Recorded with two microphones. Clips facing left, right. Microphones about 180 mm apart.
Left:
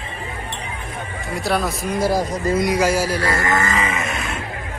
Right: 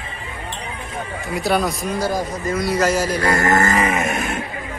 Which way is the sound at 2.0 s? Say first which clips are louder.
Left 4 dB; 30° left (ahead or behind).